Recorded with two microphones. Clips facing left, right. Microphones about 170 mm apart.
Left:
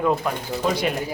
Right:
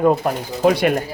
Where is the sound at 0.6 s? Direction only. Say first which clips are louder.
Right 8 dB; 65° right (ahead or behind).